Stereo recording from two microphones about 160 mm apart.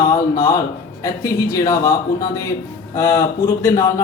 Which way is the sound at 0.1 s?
20° left (ahead or behind).